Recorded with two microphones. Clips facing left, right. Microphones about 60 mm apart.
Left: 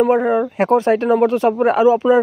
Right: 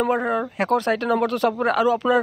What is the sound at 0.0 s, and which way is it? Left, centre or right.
Speech, centre.